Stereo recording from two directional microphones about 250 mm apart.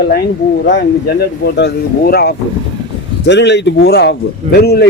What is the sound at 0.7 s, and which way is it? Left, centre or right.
A man's voice, left.